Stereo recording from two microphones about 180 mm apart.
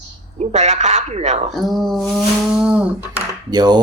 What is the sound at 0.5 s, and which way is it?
Speech, 40° right (ahead or behind).